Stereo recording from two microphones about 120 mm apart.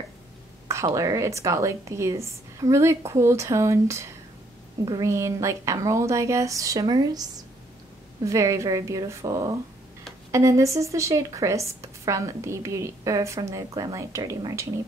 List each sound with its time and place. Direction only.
0.9 s a woman's voice: 25° right (ahead or behind)